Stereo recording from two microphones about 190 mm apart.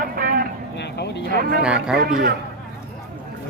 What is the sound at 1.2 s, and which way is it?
A man's voice, 50° right (ahead or behind).